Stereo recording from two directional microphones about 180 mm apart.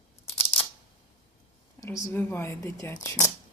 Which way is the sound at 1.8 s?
15° left (ahead or behind).